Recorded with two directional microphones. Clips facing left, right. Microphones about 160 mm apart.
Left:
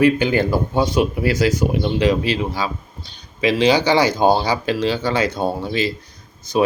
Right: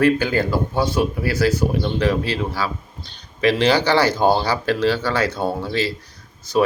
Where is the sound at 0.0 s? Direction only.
20° left (ahead or behind).